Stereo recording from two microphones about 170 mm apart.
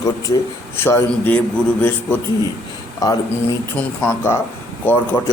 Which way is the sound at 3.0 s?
20° left (ahead or behind).